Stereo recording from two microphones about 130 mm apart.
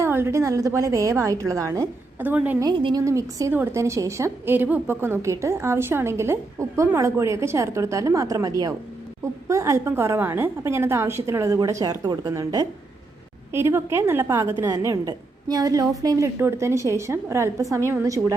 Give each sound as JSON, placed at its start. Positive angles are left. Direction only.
{"t": 0.0, "sound": "a woman's voice", "side_deg": -20}
{"t": 2.6, "sound": "a woman's voice", "side_deg": -35}
{"t": 3.0, "sound": "a woman's voice", "side_deg": -25}